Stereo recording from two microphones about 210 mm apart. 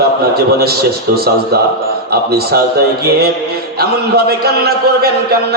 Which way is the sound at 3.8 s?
50° right (ahead or behind).